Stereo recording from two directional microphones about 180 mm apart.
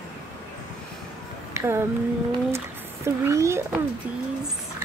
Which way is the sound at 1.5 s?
15° right (ahead or behind).